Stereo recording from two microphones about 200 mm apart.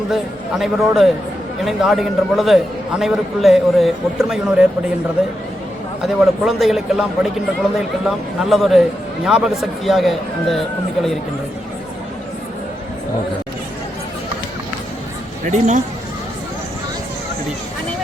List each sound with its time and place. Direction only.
0.1 s a man's voice: centre (ahead or behind)
6.4 s a man's voice: centre (ahead or behind)
15.4 s speech: 35° right (ahead or behind)